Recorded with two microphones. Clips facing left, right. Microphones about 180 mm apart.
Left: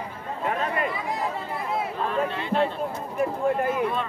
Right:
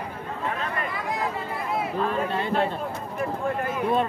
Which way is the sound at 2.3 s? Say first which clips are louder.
Even; 40° right (ahead or behind).